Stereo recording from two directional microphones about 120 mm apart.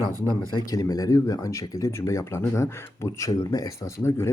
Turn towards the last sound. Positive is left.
turn(degrees=25)  # may be behind; listen again after turning